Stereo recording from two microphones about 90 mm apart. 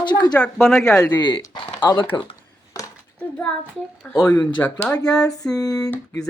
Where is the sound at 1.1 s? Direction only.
55° left (ahead or behind).